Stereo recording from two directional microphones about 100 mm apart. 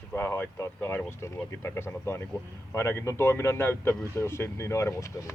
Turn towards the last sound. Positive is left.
turn(degrees=30)  # may be behind; listen again after turning